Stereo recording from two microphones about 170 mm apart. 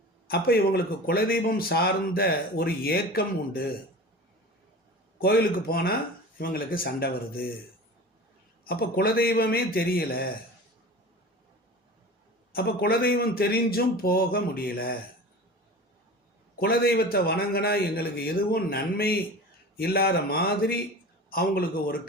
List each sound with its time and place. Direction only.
0.3 s a man's voice: 65° left (ahead or behind)
5.2 s a man's voice: 65° left (ahead or behind)
8.6 s a man's voice: 65° left (ahead or behind)
12.5 s a man's voice: 65° left (ahead or behind)
16.6 s a man's voice: 65° left (ahead or behind)